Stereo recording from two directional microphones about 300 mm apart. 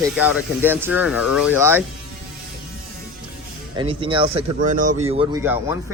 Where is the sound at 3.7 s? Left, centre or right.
Centre.